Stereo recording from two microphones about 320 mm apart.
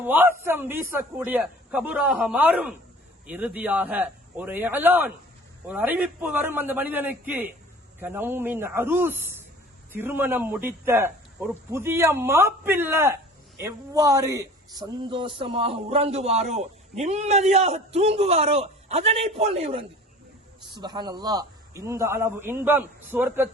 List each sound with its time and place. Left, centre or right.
0.0 s a man's voice: centre